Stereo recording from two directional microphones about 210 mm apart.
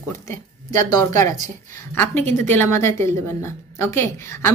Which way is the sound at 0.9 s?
15° left (ahead or behind).